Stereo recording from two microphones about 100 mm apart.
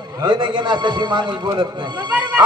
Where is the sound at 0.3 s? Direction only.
50° right (ahead or behind).